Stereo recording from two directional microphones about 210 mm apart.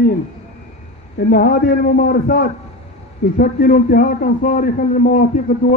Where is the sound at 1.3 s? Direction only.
45° left (ahead or behind).